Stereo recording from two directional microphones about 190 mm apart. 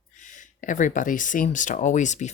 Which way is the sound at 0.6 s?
45° left (ahead or behind).